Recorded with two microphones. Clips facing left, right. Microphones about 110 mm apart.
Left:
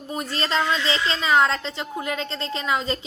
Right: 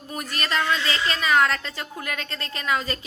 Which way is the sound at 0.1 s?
25° left (ahead or behind).